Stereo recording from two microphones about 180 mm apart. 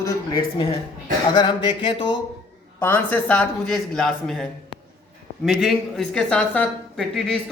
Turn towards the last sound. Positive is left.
turn(degrees=5)  # may be behind; listen again after turning